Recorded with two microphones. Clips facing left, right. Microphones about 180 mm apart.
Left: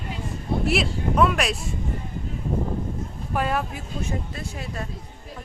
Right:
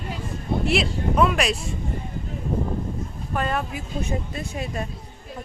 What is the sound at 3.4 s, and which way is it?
Speech, 10° left (ahead or behind).